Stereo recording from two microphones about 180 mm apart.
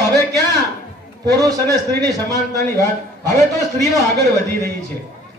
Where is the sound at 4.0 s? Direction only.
20° left (ahead or behind).